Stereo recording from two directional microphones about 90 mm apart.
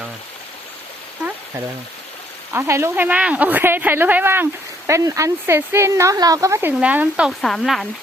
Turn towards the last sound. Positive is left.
turn(degrees=0)  # may be behind; listen again after turning